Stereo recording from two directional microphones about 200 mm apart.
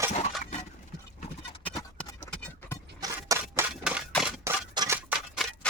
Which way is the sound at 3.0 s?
15° right (ahead or behind).